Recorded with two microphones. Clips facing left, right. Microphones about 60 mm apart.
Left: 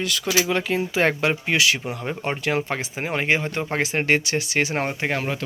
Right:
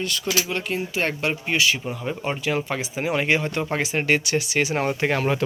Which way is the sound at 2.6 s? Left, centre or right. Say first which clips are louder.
Even; left.